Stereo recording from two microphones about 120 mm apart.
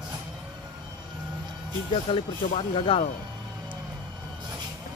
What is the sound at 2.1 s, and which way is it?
Speech, 45° left (ahead or behind).